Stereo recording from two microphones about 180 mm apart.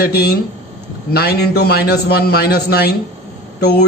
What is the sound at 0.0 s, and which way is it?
A man's voice, 60° left (ahead or behind).